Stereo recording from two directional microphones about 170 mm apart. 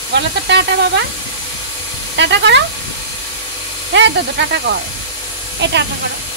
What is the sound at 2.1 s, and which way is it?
Speech, 90° right.